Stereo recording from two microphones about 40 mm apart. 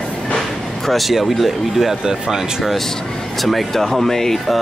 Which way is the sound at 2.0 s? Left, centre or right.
Centre.